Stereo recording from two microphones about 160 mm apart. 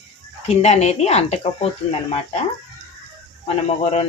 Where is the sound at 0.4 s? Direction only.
45° left (ahead or behind).